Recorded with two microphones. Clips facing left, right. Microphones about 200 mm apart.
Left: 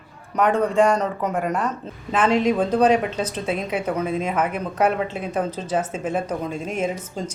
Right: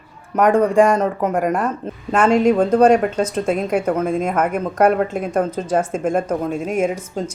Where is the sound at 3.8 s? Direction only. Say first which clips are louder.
Right 5 dB; 50° right (ahead or behind).